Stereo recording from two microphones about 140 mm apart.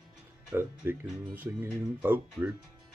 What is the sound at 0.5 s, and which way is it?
Speech, 15° right (ahead or behind).